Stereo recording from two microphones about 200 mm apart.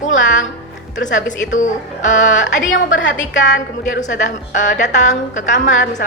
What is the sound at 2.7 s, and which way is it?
A woman's voice, 70° left (ahead or behind).